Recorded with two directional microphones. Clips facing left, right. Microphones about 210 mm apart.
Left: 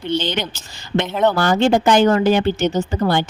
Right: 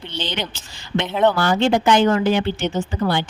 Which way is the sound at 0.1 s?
45° left (ahead or behind).